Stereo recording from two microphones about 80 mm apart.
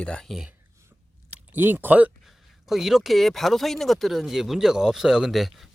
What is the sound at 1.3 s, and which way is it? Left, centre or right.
Speech, right.